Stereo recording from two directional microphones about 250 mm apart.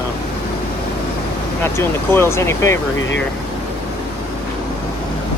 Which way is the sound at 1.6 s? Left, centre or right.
Centre.